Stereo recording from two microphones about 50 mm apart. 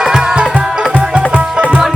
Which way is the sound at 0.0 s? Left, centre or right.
Centre.